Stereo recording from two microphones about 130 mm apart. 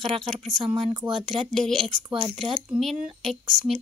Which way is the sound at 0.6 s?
25° right (ahead or behind).